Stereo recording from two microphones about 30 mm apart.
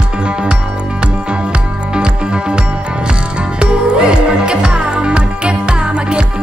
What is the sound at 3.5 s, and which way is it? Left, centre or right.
Music, right.